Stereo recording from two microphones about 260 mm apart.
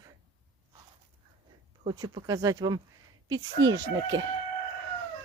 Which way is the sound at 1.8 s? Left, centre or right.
Centre.